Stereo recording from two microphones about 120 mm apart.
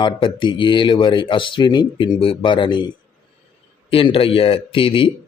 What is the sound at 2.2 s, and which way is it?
Speech, 45° left (ahead or behind).